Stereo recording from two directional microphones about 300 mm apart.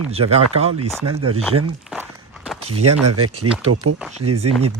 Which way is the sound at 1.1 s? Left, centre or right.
Right.